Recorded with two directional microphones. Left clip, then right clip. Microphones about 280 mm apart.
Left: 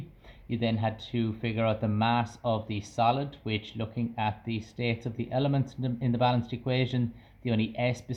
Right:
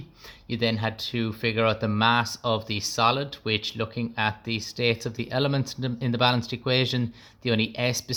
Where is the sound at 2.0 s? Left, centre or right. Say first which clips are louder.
Right 6 dB; right.